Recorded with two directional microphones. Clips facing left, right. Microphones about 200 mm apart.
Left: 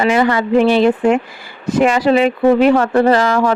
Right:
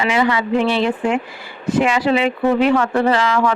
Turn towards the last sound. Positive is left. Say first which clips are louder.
# left 4 dB
turn(degrees=40)  # may be behind; listen again after turning